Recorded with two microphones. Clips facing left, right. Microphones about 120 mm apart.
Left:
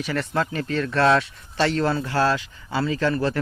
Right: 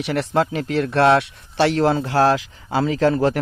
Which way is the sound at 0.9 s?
65° right (ahead or behind).